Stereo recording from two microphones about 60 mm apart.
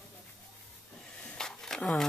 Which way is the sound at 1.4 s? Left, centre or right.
Centre.